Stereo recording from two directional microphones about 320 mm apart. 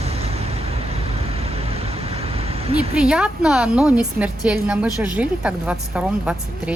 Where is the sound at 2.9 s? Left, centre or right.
Centre.